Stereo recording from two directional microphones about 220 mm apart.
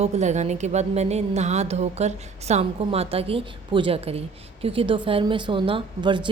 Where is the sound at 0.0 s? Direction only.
30° right (ahead or behind).